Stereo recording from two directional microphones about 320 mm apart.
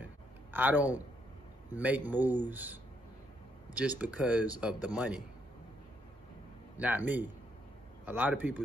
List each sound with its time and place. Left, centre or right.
0.0 s a sound: centre
1.7 s speech: centre
4.0 s speech: centre
6.8 s speech: centre